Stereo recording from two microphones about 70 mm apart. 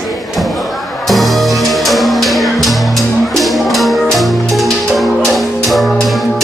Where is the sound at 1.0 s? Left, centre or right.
Centre.